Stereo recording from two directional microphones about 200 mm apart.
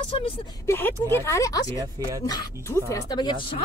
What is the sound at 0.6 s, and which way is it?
Speech, 10° left (ahead or behind).